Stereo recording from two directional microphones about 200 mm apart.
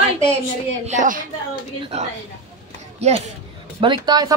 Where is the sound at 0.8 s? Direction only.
40° right (ahead or behind).